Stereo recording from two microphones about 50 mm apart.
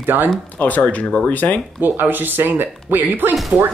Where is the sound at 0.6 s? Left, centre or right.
Left.